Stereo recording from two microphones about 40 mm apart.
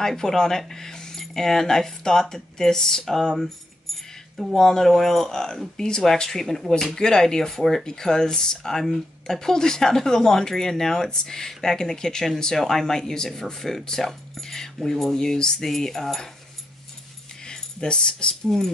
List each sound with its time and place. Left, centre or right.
0.0 s speech: centre
7.0 s speech: centre
15.1 s speech: centre
17.5 s speech: left